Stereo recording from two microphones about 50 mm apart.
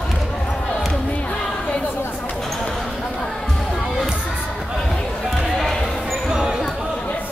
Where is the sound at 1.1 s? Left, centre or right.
Left.